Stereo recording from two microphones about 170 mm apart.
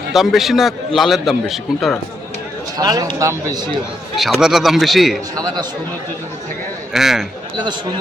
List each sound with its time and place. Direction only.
0.1 s a man's voice: centre (ahead or behind)
2.7 s speech: 20° right (ahead or behind)
4.1 s a man's voice: centre (ahead or behind)
5.4 s speech: 25° right (ahead or behind)
6.9 s a man's voice: centre (ahead or behind)